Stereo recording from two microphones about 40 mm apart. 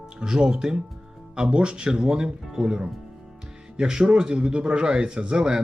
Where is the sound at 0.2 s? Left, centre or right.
Right.